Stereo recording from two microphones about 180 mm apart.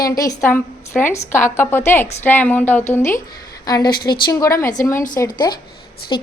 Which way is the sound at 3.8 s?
55° left (ahead or behind).